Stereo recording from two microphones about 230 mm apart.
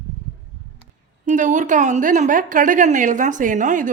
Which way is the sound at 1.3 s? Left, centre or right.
Right.